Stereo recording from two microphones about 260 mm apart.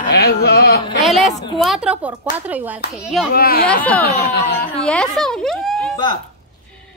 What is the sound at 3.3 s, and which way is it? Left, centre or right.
Speech, left.